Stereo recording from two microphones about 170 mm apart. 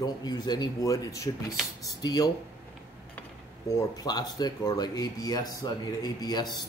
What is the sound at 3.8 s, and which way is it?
Speech, 25° left (ahead or behind).